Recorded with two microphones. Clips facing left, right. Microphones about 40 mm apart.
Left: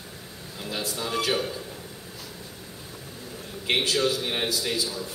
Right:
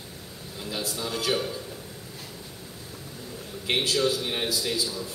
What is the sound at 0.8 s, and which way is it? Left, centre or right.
Speech, centre.